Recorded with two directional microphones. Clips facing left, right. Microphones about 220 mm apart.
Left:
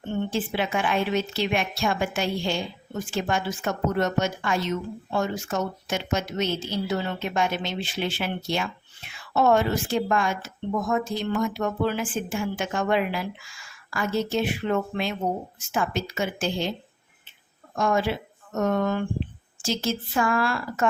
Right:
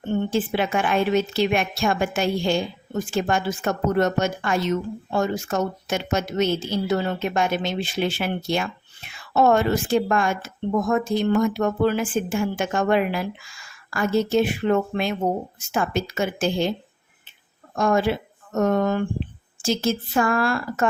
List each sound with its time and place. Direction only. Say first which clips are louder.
0.3 s a woman's voice: right 3 dB; 50° right (ahead or behind)
17.7 s a woman's voice: right 3 dB; 50° right (ahead or behind)